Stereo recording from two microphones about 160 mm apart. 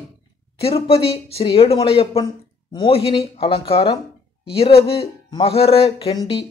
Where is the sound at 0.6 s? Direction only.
40° left (ahead or behind).